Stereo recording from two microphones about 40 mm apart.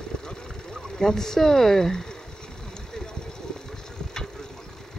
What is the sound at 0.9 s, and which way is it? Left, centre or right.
Speech, centre.